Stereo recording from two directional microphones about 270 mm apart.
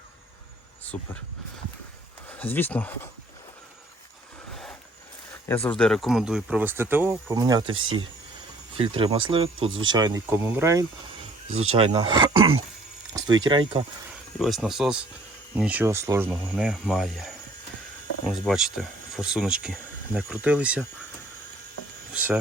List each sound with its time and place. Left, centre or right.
0.9 s speech: centre
2.4 s speech: centre
5.5 s speech: centre
11.7 s speech: right
14.3 s speech: centre
22.1 s a sound: centre